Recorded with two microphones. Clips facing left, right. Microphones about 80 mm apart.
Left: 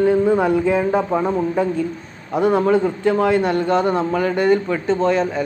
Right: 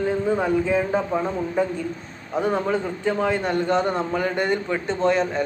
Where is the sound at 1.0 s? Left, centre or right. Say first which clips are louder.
Left 5 dB; left.